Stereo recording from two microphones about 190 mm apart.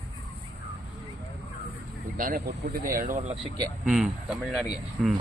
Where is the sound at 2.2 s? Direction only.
50° right (ahead or behind).